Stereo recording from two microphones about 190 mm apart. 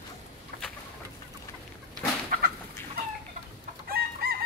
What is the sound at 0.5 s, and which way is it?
Bird, 55° right (ahead or behind).